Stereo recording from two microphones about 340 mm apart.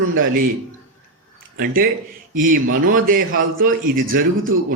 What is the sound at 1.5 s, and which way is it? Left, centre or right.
A man's voice, right.